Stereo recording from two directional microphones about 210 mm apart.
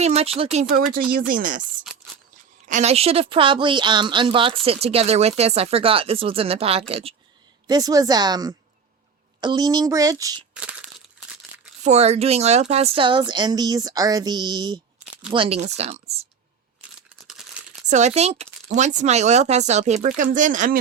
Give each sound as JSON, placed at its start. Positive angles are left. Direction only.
{"t": 0.0, "sound": "speech", "side_deg": -30}
{"t": 2.6, "sound": "a woman's voice", "side_deg": -35}
{"t": 7.7, "sound": "speech", "side_deg": -15}
{"t": 11.8, "sound": "a woman's voice", "side_deg": -30}
{"t": 17.8, "sound": "speech", "side_deg": -35}